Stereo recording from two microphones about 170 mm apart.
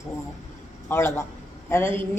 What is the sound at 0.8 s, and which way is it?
Speech, 15° left (ahead or behind).